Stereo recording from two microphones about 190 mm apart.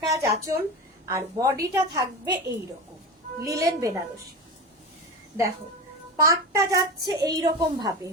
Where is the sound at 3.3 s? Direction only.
15° right (ahead or behind).